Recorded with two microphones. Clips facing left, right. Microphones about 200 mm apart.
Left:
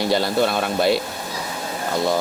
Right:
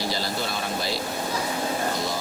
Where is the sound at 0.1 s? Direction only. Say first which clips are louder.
Left 9 dB; 60° left (ahead or behind).